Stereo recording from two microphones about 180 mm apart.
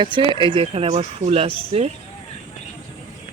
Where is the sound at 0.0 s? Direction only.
25° right (ahead or behind).